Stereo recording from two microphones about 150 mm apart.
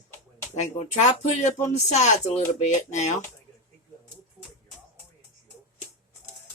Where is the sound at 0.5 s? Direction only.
50° left (ahead or behind).